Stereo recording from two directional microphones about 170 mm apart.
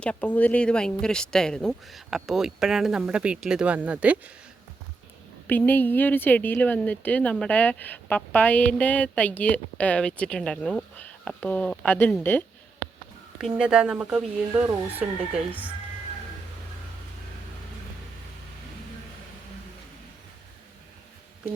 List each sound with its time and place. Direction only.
0.0 s speech: 10° left (ahead or behind); by 4.2 s 10° right (ahead or behind)
5.5 s speech: 10° left (ahead or behind)
13.4 s speech: 5° right (ahead or behind)